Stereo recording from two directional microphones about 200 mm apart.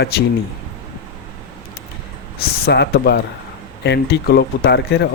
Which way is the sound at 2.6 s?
55° left (ahead or behind).